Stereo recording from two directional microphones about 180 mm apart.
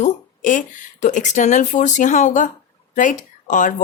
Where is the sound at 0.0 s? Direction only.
45° left (ahead or behind).